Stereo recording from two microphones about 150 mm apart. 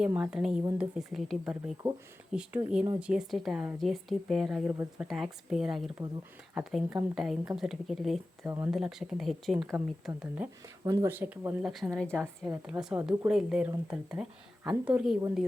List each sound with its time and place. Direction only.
0.0 s speech: 5° right (ahead or behind)
4.7 s speech: 15° right (ahead or behind)
5.0 s speech: centre (ahead or behind)
8.4 s speech: 15° right (ahead or behind)
8.7 s speech: centre (ahead or behind)
9.6 s speech: 15° right (ahead or behind)
10.8 s speech: 20° right (ahead or behind)
11.7 s speech: centre (ahead or behind)
12.6 s speech: 10° right (ahead or behind)